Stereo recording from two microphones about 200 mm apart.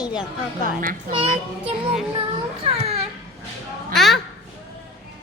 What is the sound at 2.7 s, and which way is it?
Speech, 30° right (ahead or behind).